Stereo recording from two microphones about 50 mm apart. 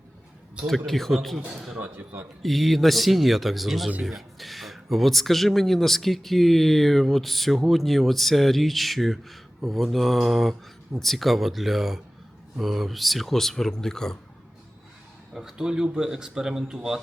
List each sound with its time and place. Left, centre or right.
0.9 s speech: centre
1.5 s speech: centre
1.8 s a man's voice: right
2.4 s speech: centre
15.3 s speech: centre